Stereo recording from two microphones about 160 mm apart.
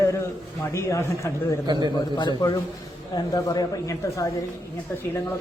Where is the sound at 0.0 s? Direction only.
20° left (ahead or behind).